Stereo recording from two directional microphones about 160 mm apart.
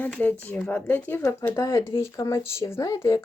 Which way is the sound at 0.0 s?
10° left (ahead or behind).